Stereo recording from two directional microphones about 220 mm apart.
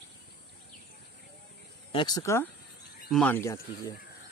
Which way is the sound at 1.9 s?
20° left (ahead or behind).